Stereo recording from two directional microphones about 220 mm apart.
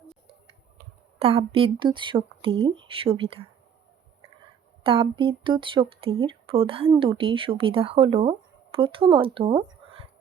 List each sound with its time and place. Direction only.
1.2 s speech: 25° right (ahead or behind)
4.8 s speech: 25° right (ahead or behind)